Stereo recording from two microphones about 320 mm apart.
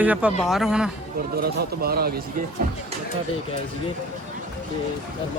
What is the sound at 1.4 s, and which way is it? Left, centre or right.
Speech, right.